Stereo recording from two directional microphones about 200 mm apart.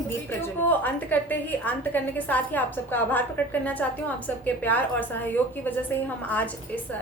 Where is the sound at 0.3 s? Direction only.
10° left (ahead or behind).